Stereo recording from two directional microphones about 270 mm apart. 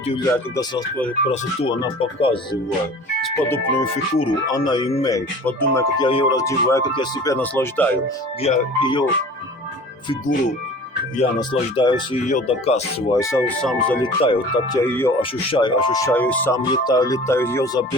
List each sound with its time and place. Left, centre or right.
0.1 s speech: centre
3.8 s speech: centre
5.1 s speech: centre
8.4 s speech: centre
11.2 s speech: centre
14.0 s speech: centre
14.8 s speech: centre
15.2 s speech: centre